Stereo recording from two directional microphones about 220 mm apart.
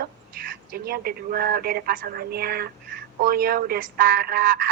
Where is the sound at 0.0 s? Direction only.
40° right (ahead or behind).